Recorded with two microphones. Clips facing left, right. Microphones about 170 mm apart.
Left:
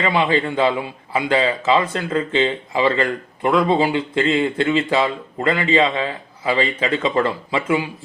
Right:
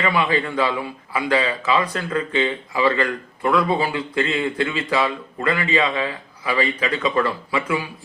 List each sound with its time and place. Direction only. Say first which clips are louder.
0.0 s a man's voice: left 2 dB; 25° left (ahead or behind)